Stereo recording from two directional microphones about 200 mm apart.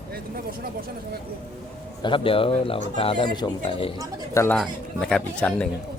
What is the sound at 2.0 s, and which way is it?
Speech, 25° left (ahead or behind).